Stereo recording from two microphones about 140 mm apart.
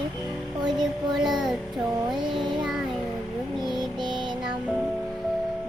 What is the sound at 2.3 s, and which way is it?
Child singing, 35° right (ahead or behind).